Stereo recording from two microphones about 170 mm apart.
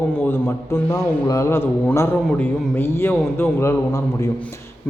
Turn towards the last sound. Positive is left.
turn(degrees=15)  # may be behind; listen again after turning